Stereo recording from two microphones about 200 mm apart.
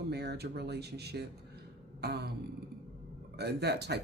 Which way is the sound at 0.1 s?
55° right (ahead or behind).